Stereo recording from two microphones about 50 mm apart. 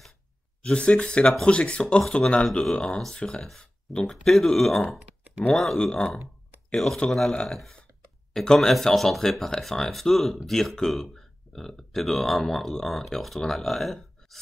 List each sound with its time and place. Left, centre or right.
0.6 s speech: left
4.0 s speech: centre
5.8 s speech: centre
7.4 s speech: centre